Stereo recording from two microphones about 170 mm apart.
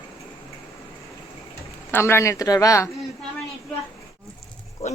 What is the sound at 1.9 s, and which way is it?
Speech, 15° left (ahead or behind).